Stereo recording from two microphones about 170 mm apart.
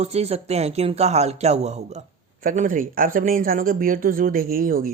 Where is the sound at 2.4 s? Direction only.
50° right (ahead or behind).